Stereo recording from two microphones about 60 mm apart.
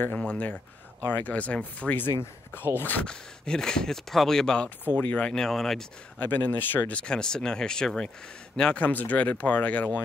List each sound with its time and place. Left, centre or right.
0.3 s speech: left
2.7 s speech: left
3.1 s speech: centre
4.9 s speech: left
5.3 s speech: centre
6.2 s speech: left
6.9 s speech: centre
8.8 s speech: left